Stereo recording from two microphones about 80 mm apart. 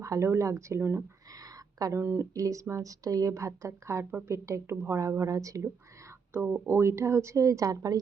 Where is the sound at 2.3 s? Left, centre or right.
Right.